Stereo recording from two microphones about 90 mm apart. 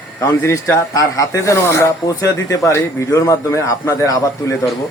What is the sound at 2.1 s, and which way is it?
A man's voice, 40° left (ahead or behind).